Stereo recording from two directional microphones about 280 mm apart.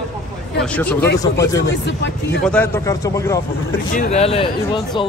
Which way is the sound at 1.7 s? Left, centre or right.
Left.